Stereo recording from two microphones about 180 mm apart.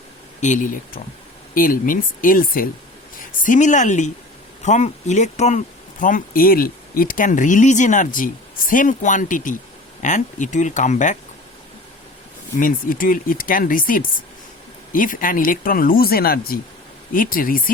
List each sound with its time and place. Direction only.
0.3 s speech: 45° left (ahead or behind)
12.5 s speech: 50° left (ahead or behind)